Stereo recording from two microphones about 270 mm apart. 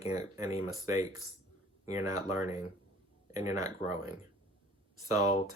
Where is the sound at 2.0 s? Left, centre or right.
Centre.